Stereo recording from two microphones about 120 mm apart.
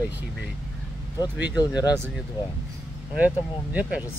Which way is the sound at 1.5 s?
35° left (ahead or behind).